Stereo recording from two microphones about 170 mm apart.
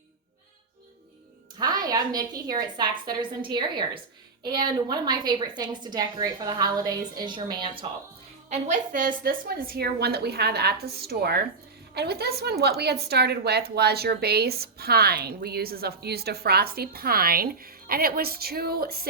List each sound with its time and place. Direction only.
1.5 s a woman's voice: 25° right (ahead or behind)
8.4 s a woman's voice: 45° right (ahead or behind); by 19.0 s 65° right (ahead or behind)